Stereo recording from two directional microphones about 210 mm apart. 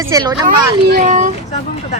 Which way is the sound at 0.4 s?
45° right (ahead or behind).